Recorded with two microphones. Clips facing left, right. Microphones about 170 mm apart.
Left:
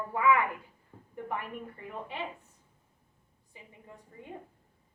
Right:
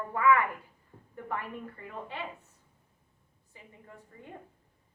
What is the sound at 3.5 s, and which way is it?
Speech, 15° left (ahead or behind).